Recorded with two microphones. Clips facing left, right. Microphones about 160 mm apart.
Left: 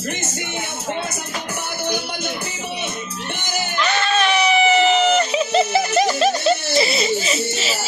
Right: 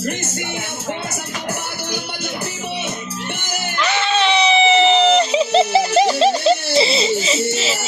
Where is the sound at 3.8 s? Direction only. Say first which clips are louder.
Right 2 dB; 20° right (ahead or behind).